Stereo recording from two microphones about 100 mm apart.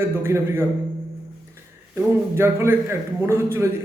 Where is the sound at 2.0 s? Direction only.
25° right (ahead or behind).